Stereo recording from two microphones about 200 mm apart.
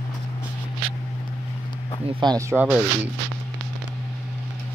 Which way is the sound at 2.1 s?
20° right (ahead or behind).